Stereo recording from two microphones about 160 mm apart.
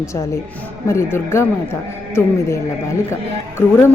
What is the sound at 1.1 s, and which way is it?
Speech, 15° left (ahead or behind).